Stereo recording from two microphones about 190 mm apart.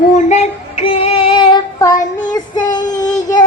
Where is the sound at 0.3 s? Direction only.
35° left (ahead or behind).